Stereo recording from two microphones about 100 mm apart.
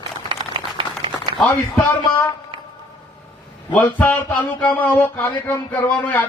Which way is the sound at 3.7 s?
15° left (ahead or behind).